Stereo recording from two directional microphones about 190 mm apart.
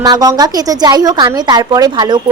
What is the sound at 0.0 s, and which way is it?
A woman's voice, 20° right (ahead or behind).